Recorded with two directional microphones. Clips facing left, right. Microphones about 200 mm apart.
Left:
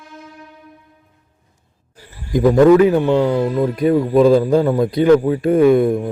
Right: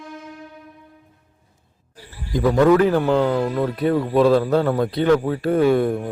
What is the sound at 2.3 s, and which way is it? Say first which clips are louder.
Speech: left 5 dB; 20° left (ahead or behind).